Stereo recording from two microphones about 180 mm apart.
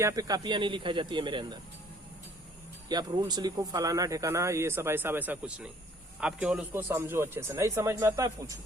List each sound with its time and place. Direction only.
0.0 s speech: 20° right (ahead or behind)
2.9 s speech: 25° right (ahead or behind)